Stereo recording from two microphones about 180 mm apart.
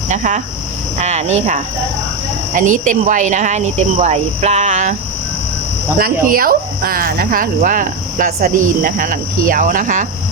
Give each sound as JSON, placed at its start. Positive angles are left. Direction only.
{"t": 0.1, "sound": "speech", "side_deg": -40}
{"t": 2.6, "sound": "speech", "side_deg": -45}
{"t": 6.0, "sound": "speech", "side_deg": -55}